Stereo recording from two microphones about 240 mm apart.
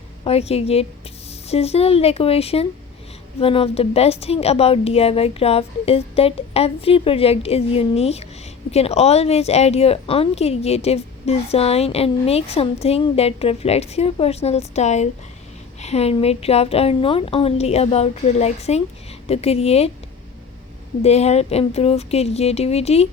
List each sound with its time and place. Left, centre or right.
0.3 s speech: left
21.0 s speech: left